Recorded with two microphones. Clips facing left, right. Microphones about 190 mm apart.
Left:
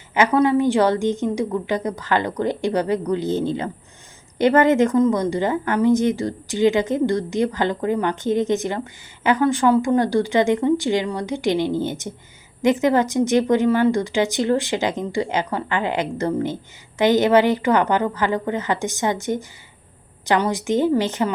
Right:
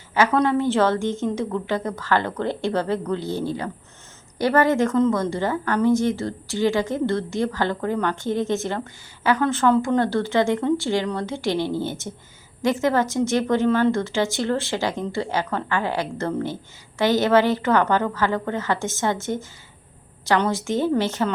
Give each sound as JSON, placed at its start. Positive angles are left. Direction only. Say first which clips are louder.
{"t": 0.1, "sound": "a woman's voice", "louder": "left 2 dB", "side_deg": 15}